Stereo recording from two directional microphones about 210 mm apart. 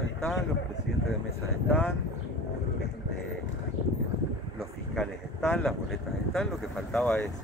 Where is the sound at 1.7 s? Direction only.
10° left (ahead or behind).